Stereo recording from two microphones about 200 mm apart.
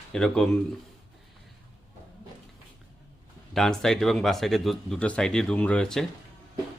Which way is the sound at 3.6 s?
Centre (ahead or behind).